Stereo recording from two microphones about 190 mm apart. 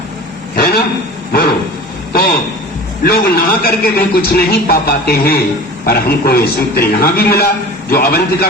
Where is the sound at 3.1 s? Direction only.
50° left (ahead or behind).